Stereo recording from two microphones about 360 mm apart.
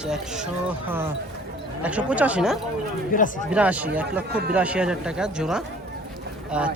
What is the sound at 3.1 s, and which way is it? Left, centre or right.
Speech, left.